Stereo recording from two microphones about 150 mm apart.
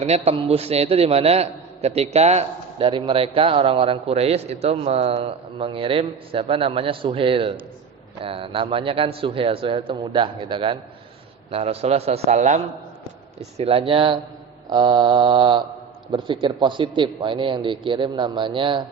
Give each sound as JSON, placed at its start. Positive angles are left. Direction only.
{"t": 0.0, "sound": "a man's voice", "side_deg": -45}